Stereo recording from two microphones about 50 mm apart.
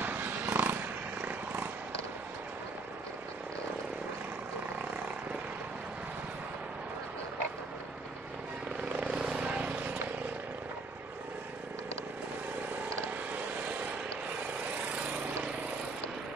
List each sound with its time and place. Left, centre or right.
0.0 s a sound: right
1.2 s purr: right
9.1 s vehicle: centre
9.4 s vehicle: right